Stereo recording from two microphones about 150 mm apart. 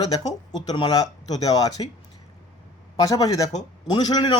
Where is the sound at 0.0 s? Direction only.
25° left (ahead or behind).